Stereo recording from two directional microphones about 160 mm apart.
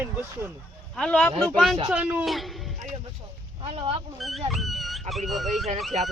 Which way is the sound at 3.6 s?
35° right (ahead or behind).